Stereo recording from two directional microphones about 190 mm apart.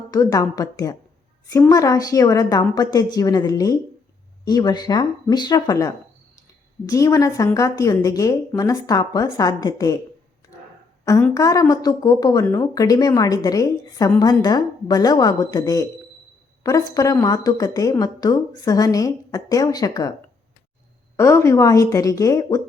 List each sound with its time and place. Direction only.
0.1 s a woman's voice: 20° left (ahead or behind)
11.3 s a woman's voice: 20° left (ahead or behind)
21.2 s a woman's voice: 15° left (ahead or behind)